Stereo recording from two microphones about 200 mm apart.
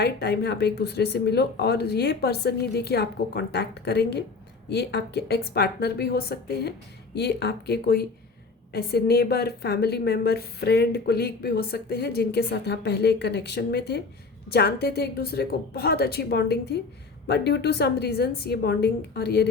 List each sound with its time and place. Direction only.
0.0 s a woman's voice: 55° left (ahead or behind)